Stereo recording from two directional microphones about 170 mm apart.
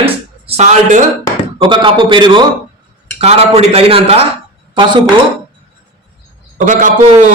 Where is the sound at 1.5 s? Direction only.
30° right (ahead or behind).